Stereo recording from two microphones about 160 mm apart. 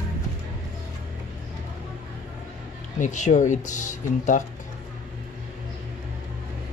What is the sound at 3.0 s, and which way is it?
Speech, 50° left (ahead or behind).